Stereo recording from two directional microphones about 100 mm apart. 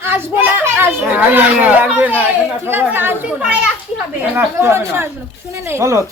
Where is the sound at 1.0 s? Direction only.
15° right (ahead or behind).